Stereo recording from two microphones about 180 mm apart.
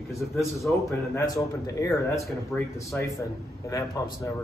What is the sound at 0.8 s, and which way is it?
A man's voice, 15° left (ahead or behind).